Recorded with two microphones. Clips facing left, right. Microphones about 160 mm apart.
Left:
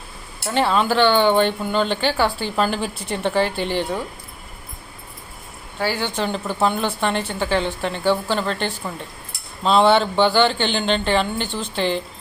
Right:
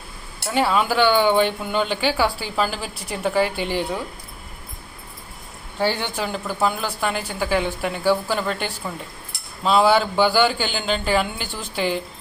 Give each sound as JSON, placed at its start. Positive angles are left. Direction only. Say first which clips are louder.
{"t": 0.5, "sound": "speech", "louder": "left 1 dB", "side_deg": -10}
{"t": 6.1, "sound": "speech", "louder": "left 2 dB", "side_deg": -5}
{"t": 9.6, "sound": "speech", "louder": "left 1 dB", "side_deg": -5}